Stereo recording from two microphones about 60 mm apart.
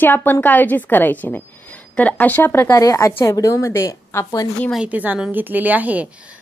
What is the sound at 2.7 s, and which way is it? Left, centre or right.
Speech, left.